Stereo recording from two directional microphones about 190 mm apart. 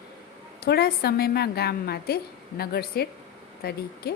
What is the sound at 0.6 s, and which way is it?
A woman's voice, 55° left (ahead or behind).